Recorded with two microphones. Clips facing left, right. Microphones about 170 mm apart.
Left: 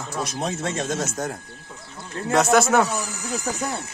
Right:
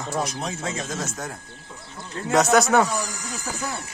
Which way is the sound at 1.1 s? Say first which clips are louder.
Left 5 dB; 40° left (ahead or behind).